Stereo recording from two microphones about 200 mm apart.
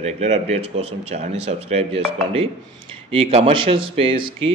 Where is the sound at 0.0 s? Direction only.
30° right (ahead or behind).